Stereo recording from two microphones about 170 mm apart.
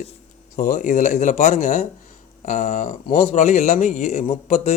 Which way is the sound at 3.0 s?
35° left (ahead or behind).